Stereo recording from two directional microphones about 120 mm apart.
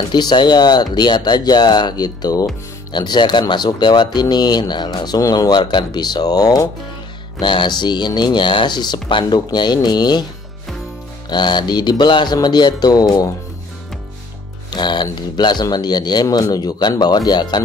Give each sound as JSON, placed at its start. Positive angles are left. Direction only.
{"t": 0.1, "sound": "speech", "side_deg": 35}
{"t": 11.2, "sound": "speech", "side_deg": 40}
{"t": 14.7, "sound": "speech", "side_deg": 40}